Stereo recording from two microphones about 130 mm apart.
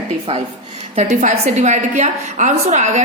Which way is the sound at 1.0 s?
65° right (ahead or behind).